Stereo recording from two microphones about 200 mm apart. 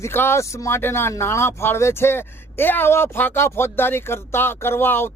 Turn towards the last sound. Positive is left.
turn(degrees=10)  # may be behind; listen again after turning